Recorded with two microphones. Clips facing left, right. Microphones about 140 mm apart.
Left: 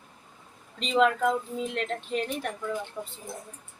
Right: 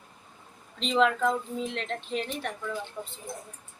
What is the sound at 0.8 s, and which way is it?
A woman's voice, 5° left (ahead or behind).